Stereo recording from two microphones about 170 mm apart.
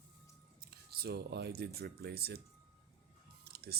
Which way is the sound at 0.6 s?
65° right (ahead or behind).